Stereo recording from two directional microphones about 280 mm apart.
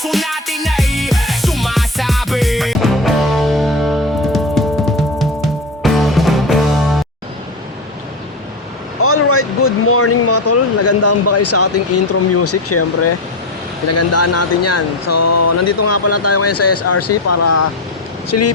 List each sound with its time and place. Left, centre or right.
0.0 s music: centre
9.0 s a sound: left
12.4 s speech: left